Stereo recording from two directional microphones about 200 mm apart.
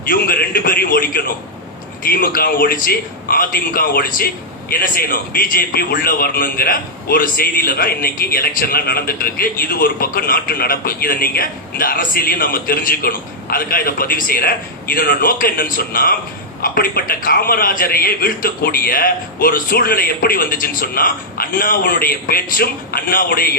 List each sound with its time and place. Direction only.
0.0 s a man's voice: 45° left (ahead or behind)